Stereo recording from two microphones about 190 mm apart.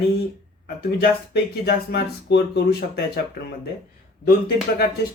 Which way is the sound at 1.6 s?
60° left (ahead or behind).